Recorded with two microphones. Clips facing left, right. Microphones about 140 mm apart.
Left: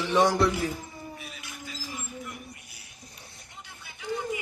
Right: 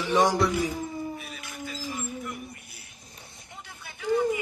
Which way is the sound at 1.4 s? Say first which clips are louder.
Right 5 dB; 50° right (ahead or behind).